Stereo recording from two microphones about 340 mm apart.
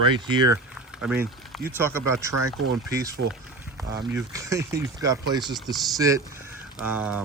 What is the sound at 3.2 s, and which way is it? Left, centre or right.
Speech, right.